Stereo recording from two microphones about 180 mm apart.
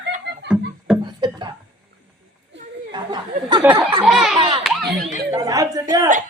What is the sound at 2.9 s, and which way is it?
Speech, 25° right (ahead or behind).